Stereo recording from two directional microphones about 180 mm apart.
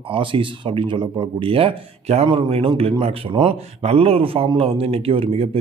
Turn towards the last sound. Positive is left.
turn(degrees=-30)  # may be behind; listen again after turning